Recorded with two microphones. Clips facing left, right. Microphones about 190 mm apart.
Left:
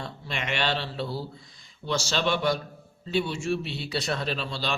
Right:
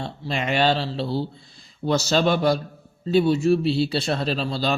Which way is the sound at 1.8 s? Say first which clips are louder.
Right 7 dB; 45° right (ahead or behind).